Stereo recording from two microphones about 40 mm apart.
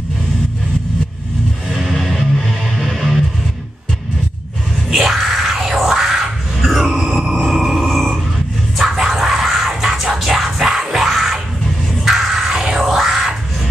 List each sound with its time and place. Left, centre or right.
1.7 s music: centre
2.0 s music: centre
4.9 s music: centre
5.8 s grunt: centre
7.2 s a sound: centre
8.7 s music: centre
12.9 s a sound: centre